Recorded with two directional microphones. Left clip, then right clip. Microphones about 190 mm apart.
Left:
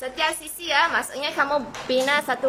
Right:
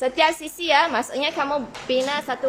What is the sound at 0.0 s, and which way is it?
A woman's voice, 20° right (ahead or behind).